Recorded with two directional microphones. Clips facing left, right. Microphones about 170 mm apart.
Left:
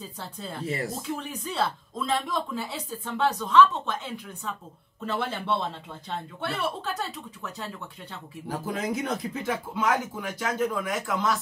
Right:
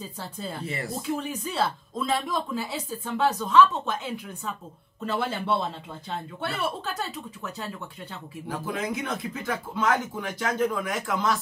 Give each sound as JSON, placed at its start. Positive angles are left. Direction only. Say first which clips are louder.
{"t": 0.7, "sound": "speech", "louder": "left 6 dB", "side_deg": 40}
{"t": 1.4, "sound": "speech", "louder": "right 1 dB", "side_deg": -5}
{"t": 8.5, "sound": "speech", "louder": "left 1 dB", "side_deg": 40}
{"t": 9.5, "sound": "speech", "louder": "right 1 dB", "side_deg": 10}